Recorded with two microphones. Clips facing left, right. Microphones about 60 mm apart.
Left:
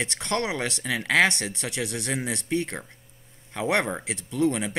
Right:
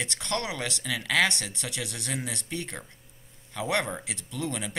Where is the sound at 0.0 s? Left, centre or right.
Left.